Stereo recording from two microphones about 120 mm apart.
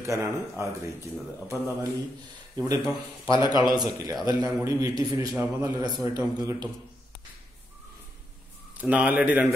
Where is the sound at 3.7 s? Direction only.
35° right (ahead or behind).